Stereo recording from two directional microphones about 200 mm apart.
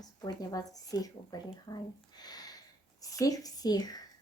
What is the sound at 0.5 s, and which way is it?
Speech, 20° left (ahead or behind).